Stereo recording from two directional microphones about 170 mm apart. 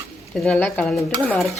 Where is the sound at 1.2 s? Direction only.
5° left (ahead or behind).